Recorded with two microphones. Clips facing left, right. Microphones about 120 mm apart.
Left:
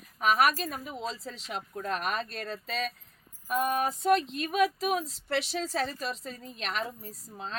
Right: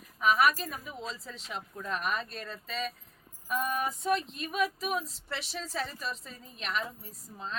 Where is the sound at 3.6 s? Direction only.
60° left (ahead or behind); by 6.8 s 80° left.